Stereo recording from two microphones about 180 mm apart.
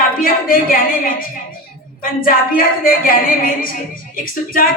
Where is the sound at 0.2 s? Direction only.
50° left (ahead or behind).